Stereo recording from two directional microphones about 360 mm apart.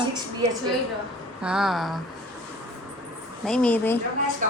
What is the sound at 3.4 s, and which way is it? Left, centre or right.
Speech, centre.